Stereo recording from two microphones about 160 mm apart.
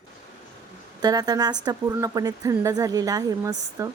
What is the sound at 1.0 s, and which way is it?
Speech, 25° right (ahead or behind).